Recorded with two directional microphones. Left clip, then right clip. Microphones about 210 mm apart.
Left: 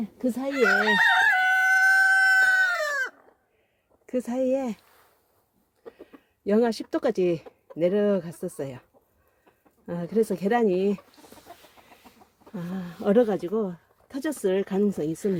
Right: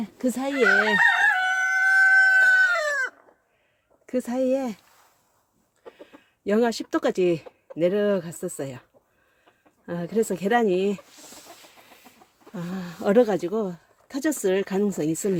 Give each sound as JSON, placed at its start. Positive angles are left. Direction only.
{"t": 0.0, "sound": "speech", "side_deg": -15}
{"t": 0.9, "sound": "chicken", "side_deg": 55}
{"t": 4.0, "sound": "speech", "side_deg": -5}
{"t": 6.4, "sound": "speech", "side_deg": -5}
{"t": 12.5, "sound": "speech", "side_deg": -10}